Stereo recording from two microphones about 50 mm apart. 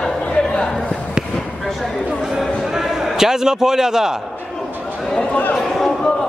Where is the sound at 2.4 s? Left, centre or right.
Centre.